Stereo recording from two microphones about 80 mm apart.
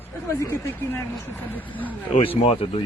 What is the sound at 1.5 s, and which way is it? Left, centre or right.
Speech, left.